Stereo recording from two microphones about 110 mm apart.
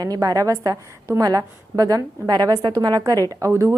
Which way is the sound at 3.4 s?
25° right (ahead or behind).